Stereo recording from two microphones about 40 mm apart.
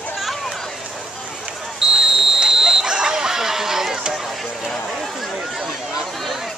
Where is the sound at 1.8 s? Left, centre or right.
Centre.